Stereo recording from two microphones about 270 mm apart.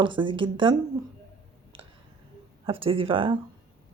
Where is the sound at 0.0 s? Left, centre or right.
Centre.